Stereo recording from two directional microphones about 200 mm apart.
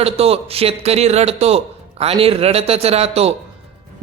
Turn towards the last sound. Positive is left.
turn(degrees=-30)  # may be behind; listen again after turning